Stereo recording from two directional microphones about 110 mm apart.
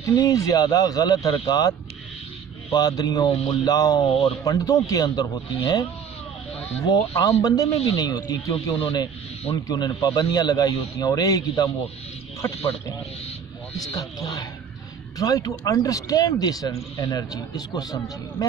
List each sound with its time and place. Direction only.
0.0 s speech: 35° left (ahead or behind)
4.0 s speech: 65° left (ahead or behind)
4.5 s speech: 30° left (ahead or behind)
6.9 s speech: 35° left (ahead or behind)
13.7 s speech: 35° left (ahead or behind)